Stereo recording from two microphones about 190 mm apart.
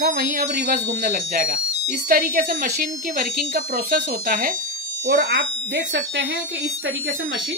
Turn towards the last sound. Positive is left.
turn(degrees=-70)  # may be behind; listen again after turning